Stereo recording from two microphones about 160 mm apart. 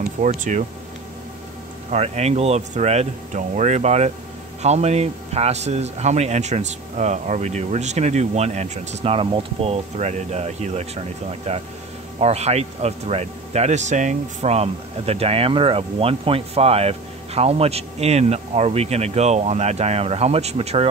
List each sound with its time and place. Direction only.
0.4 s speech: 50° right (ahead or behind)
1.9 s speech: 40° right (ahead or behind)